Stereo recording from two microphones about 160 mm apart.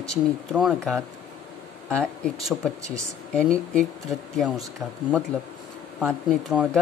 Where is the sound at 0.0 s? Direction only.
Centre (ahead or behind).